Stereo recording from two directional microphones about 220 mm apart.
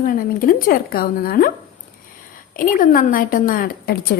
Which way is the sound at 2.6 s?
40° left (ahead or behind).